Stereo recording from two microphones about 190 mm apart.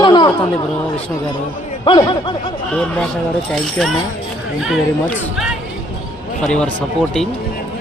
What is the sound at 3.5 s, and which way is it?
Speech, centre (ahead or behind).